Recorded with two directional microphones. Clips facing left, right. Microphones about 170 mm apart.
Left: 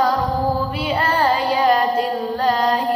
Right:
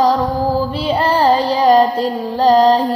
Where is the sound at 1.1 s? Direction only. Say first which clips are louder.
Right 4 dB; 30° right (ahead or behind).